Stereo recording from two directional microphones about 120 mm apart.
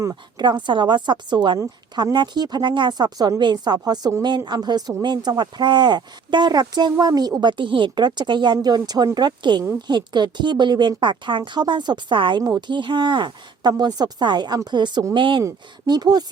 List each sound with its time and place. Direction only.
0.0 s a woman's voice: 25° right (ahead or behind)
0.4 s speech: 40° right (ahead or behind)
1.5 s a woman's voice: 25° right (ahead or behind)
2.1 s speech: 40° right (ahead or behind)